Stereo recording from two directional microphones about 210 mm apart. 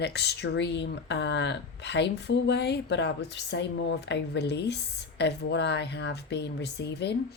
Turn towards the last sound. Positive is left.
turn(degrees=55)  # may be behind; listen again after turning